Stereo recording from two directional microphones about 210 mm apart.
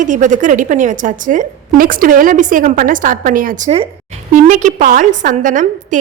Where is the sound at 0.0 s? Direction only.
35° right (ahead or behind).